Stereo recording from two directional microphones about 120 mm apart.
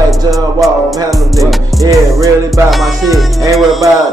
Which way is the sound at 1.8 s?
30° right (ahead or behind).